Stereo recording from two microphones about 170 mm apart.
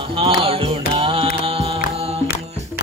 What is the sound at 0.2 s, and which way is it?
Music, 35° right (ahead or behind).